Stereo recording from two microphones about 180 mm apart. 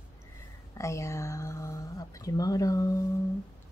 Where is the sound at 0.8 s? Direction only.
15° left (ahead or behind).